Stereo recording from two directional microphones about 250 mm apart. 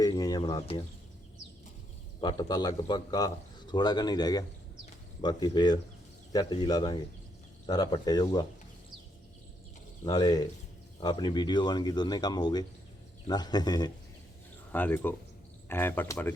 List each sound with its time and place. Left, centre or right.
0.0 s speech: centre
2.2 s a man's voice: centre
10.0 s a man's voice: centre